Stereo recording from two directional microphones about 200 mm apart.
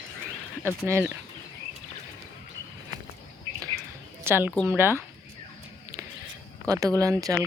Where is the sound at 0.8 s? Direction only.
10° right (ahead or behind).